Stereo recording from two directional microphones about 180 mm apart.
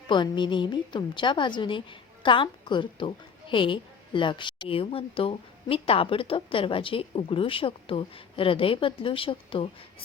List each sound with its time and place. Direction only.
0.1 s a woman's voice: 25° left (ahead or behind)